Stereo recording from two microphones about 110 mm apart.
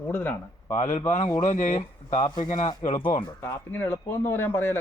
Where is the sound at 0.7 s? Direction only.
90° left.